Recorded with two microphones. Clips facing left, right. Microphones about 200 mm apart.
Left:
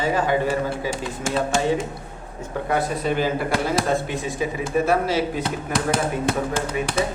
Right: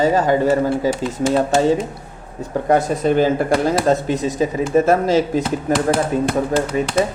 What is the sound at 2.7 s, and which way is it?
A man's voice, 45° right (ahead or behind).